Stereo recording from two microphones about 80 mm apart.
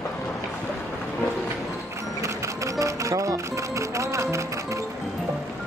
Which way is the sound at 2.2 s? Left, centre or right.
Right.